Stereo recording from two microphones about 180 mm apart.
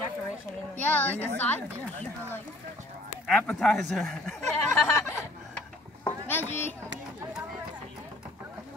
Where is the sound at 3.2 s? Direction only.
5° left (ahead or behind).